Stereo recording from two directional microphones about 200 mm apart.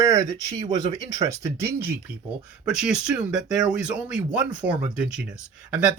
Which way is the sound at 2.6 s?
5° right (ahead or behind).